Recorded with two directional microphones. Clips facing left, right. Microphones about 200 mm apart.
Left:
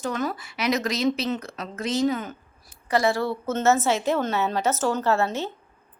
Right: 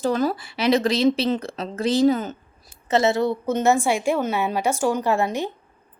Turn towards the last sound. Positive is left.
turn(degrees=-15)  # may be behind; listen again after turning